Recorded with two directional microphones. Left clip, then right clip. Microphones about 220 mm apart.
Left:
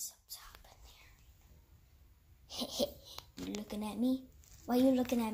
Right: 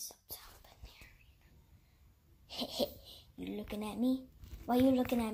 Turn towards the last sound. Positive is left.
turn(degrees=0)  # may be behind; listen again after turning